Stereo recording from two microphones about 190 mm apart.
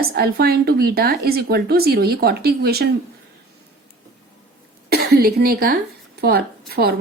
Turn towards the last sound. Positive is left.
turn(degrees=-55)  # may be behind; listen again after turning